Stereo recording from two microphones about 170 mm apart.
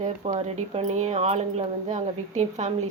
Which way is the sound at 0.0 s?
40° right (ahead or behind).